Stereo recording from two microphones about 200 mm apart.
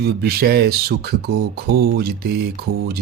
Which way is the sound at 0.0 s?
50° right (ahead or behind).